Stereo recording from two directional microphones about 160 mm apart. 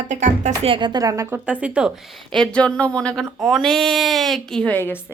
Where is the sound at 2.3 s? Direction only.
5° left (ahead or behind).